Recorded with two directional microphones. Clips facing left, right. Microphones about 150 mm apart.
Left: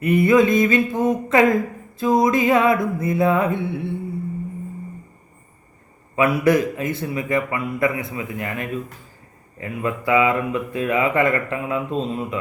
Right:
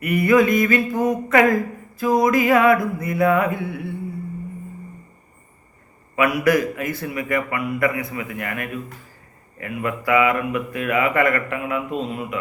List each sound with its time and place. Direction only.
0.0 s speech: 25° left (ahead or behind)
6.1 s speech: 25° left (ahead or behind)